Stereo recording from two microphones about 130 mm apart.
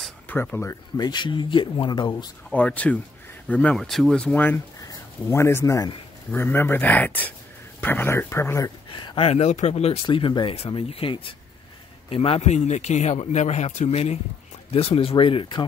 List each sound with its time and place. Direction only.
0.3 s speech: 15° left (ahead or behind)
0.9 s speech: 35° left (ahead or behind)
2.5 s speech: 10° left (ahead or behind)
4.8 s speech: 20° left (ahead or behind)
9.1 s speech: 50° left (ahead or behind)
10.0 s a man's voice: 40° left (ahead or behind)